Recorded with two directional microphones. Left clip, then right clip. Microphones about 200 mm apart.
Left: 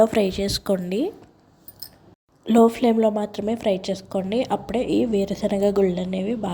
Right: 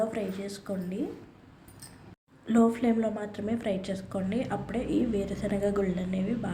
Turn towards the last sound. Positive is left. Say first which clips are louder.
# left 7 dB
turn(degrees=35)  # may be behind; listen again after turning